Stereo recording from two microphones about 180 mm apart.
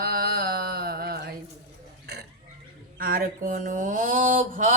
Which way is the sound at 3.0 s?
55° right (ahead or behind).